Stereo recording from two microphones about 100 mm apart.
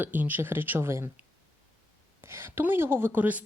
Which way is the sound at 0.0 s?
20° right (ahead or behind).